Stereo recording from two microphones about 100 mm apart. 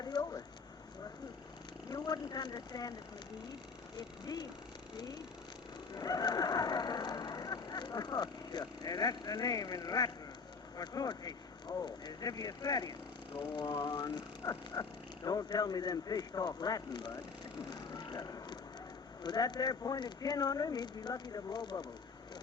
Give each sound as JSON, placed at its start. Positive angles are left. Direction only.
{"t": 0.0, "sound": "a sound", "side_deg": 40}
{"t": 1.9, "sound": "speech", "side_deg": 40}
{"t": 3.9, "sound": "speech", "side_deg": 45}
{"t": 5.9, "sound": "speech", "side_deg": 40}
{"t": 17.7, "sound": "a sound", "side_deg": 45}
{"t": 19.2, "sound": "speech", "side_deg": 45}